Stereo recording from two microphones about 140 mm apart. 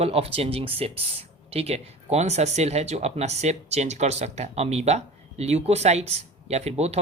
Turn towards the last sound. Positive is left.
turn(degrees=-50)  # may be behind; listen again after turning